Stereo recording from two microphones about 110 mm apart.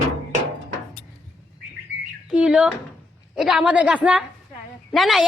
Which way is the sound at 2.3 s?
5° right (ahead or behind).